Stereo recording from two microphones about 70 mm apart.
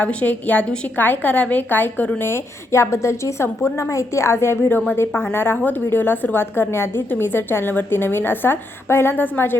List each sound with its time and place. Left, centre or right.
0.0 s a woman's voice: centre
2.2 s a woman's voice: left
4.9 s a woman's voice: left